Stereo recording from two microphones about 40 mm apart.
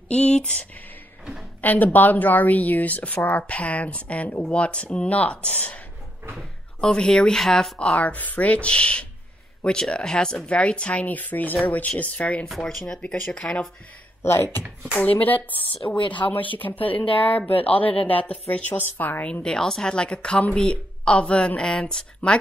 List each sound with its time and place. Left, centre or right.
0.1 s speech: left
1.6 s speech: left
6.8 s speech: centre
7.8 s speech: left; by 10.5 s centre
10.5 s speech: left
11.1 s speech: left
12.6 s speech: centre
14.2 s speech: left
15.0 s speech: left
18.7 s speech: left
19.4 s speech: centre